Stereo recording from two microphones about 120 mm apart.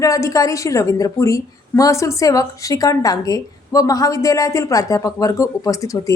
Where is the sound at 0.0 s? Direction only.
25° left (ahead or behind).